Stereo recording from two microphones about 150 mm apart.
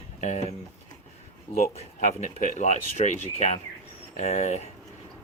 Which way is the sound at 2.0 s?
60° left (ahead or behind).